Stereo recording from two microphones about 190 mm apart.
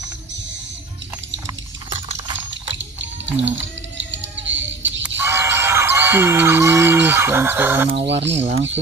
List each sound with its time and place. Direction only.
1.9 s a sound: 25° right (ahead or behind)
4.0 s music: 75° right (ahead or behind)
5.0 s speech: 10° right (ahead or behind)
8.1 s speech: 70° right (ahead or behind)
8.4 s speech: 35° right (ahead or behind)